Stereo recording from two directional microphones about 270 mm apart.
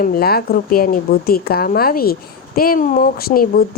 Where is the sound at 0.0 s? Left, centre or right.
Left.